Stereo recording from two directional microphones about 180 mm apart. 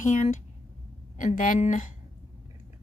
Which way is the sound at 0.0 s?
45° left (ahead or behind).